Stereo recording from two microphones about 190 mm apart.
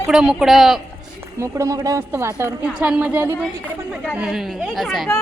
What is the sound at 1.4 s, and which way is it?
A woman's voice, 15° right (ahead or behind).